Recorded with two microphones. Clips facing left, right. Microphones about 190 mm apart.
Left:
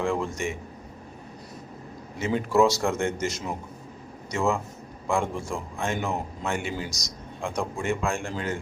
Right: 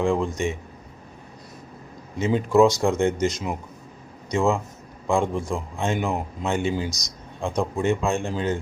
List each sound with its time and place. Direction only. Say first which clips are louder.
0.0 s a man's voice: right 4 dB; 15° right (ahead or behind)
2.1 s a man's voice: right 4 dB; 20° right (ahead or behind)